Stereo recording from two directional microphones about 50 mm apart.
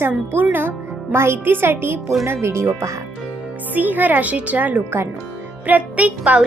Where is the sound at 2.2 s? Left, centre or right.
Right.